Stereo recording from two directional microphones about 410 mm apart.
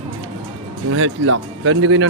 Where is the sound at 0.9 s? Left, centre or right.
Right.